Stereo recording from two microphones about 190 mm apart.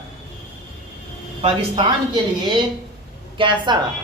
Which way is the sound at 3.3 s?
25° right (ahead or behind).